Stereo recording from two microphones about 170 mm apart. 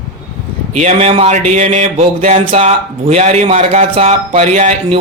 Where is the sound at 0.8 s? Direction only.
40° right (ahead or behind).